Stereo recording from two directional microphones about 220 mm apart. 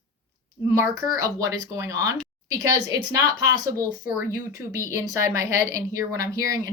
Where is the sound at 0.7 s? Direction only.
15° right (ahead or behind).